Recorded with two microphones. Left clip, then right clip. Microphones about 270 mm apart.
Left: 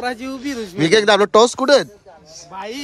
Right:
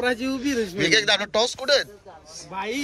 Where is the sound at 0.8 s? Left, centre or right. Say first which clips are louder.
Left 8 dB; left.